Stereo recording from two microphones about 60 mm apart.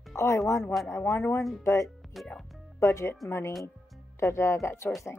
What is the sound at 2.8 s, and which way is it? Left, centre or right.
Speech, left.